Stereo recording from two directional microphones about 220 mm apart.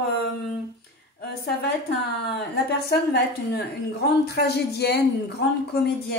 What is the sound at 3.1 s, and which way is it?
Speech, 45° left (ahead or behind).